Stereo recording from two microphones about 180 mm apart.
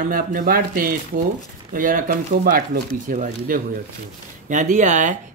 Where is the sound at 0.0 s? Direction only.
50° right (ahead or behind).